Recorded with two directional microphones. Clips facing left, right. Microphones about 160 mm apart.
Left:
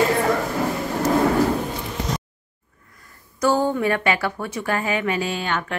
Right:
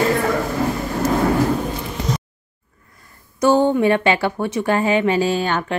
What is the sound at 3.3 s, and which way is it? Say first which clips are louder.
Speech: right 5 dB; 25° right (ahead or behind).